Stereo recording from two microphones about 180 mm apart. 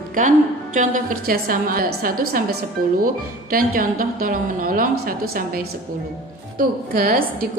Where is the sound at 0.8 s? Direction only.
50° right (ahead or behind).